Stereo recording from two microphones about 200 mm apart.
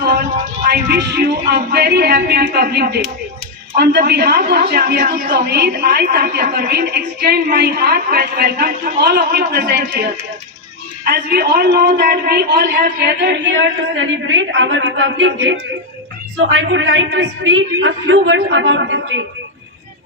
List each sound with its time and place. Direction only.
0.7 s a woman's voice: 55° right (ahead or behind)